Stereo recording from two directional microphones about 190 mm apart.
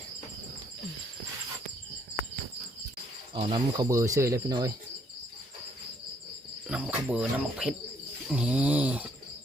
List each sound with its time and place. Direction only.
3.3 s speech: 30° right (ahead or behind)
6.7 s cricket: 5° right (ahead or behind)
8.3 s a sound: 5° right (ahead or behind)